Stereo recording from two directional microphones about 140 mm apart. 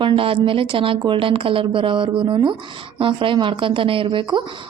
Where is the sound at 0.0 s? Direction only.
40° right (ahead or behind).